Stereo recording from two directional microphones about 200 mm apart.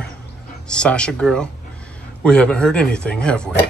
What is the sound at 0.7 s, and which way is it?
Speech, 5° left (ahead or behind).